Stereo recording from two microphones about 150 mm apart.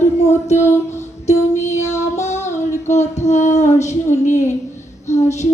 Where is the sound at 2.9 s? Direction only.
50° left (ahead or behind).